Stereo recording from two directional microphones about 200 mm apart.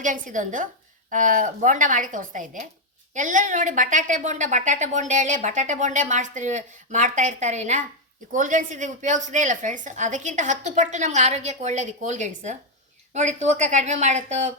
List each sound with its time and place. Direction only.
0.0 s a woman's voice: 40° right (ahead or behind)